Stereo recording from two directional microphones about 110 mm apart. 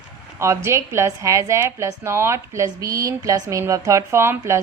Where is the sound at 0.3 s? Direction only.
25° right (ahead or behind).